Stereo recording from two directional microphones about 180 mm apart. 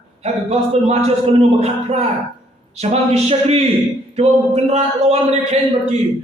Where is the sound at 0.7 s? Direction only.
35° right (ahead or behind).